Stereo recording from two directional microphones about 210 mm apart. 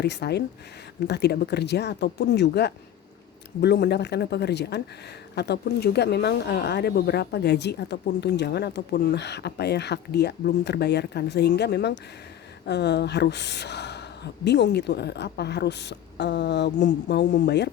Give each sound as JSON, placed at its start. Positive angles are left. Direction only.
{"t": 0.0, "sound": "speech", "side_deg": 50}